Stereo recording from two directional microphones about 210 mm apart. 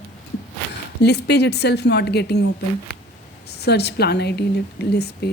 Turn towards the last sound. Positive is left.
turn(degrees=50)  # may be behind; listen again after turning